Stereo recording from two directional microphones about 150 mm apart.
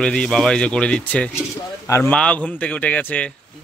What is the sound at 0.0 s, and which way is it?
Speech, 5° left (ahead or behind).